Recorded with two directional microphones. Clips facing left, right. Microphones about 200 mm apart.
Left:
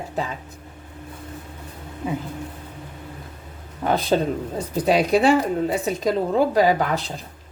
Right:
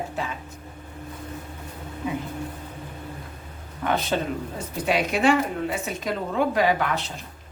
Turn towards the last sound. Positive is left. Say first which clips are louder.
# left 4 dB
turn(degrees=35)  # may be behind; listen again after turning